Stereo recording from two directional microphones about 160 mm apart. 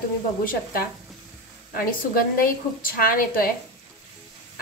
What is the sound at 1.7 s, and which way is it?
A woman's voice, 65° left (ahead or behind).